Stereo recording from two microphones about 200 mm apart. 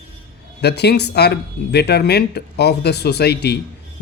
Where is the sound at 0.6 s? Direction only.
55° left (ahead or behind).